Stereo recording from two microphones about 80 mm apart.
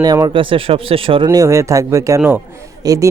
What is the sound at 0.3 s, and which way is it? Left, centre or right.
Speech, right.